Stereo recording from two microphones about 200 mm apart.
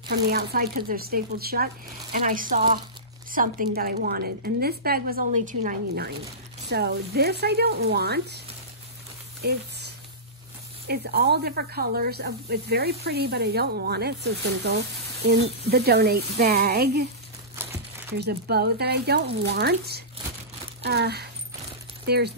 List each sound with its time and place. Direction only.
0.1 s speech: 50° right (ahead or behind)
9.4 s speech: 50° right (ahead or behind)
10.9 s speech: 50° right (ahead or behind)
17.6 s crumpling: 10° right (ahead or behind)
18.1 s speech: 55° right (ahead or behind)